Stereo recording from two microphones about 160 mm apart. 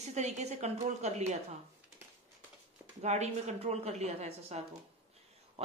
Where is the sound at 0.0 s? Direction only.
45° right (ahead or behind).